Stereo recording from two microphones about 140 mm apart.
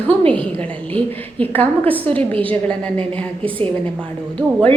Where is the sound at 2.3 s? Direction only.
40° right (ahead or behind).